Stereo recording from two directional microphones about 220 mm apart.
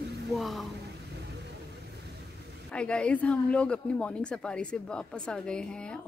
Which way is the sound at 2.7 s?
5° left (ahead or behind).